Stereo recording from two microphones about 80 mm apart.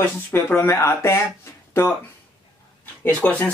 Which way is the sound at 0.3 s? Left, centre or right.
Left.